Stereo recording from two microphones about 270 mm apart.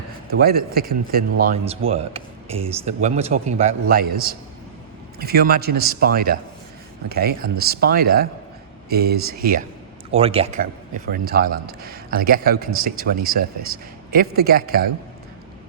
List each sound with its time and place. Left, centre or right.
0.3 s speech: right
3.8 s a man's voice: right
10.2 s a man's voice: right